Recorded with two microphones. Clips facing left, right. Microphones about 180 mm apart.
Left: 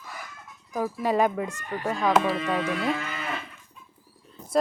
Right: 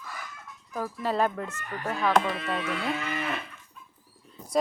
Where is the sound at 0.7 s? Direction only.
10° left (ahead or behind).